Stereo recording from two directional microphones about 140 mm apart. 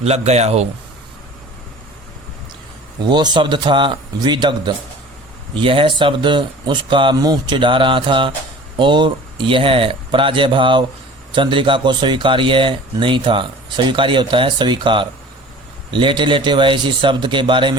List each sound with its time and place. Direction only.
0.0 s a man's voice: 50° right (ahead or behind)
3.0 s speech: 30° right (ahead or behind)